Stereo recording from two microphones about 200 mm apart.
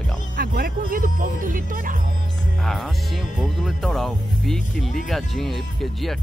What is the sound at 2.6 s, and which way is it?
Speech, centre (ahead or behind).